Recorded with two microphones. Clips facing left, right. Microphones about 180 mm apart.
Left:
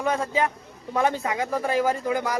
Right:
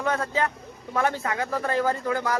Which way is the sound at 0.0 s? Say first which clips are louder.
Left 2 dB; 15° left (ahead or behind).